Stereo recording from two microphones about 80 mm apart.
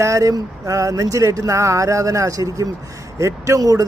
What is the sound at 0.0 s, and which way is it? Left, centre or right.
Speech, right.